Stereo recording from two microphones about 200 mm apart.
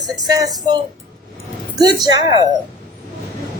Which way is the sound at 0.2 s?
20° right (ahead or behind).